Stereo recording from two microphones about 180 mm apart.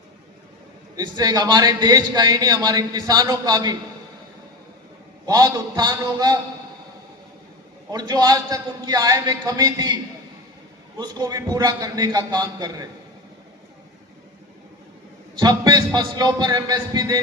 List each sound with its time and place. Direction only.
0.9 s a man's voice: 20° right (ahead or behind)
5.2 s a man's voice: 20° right (ahead or behind)
7.9 s a man's voice: 20° right (ahead or behind)
15.4 s a man's voice: 20° right (ahead or behind)